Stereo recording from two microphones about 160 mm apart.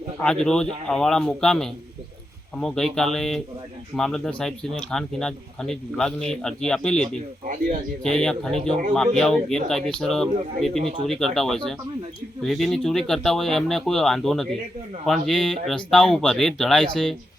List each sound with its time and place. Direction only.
0.2 s speech: 5° left (ahead or behind)
7.4 s speech: 50° right (ahead or behind)
8.0 s speech: 5° left (ahead or behind)